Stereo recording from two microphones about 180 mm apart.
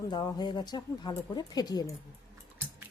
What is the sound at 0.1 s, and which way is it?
Speech, 25° left (ahead or behind).